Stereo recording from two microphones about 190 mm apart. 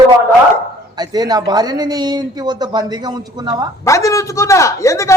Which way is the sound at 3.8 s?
15° left (ahead or behind).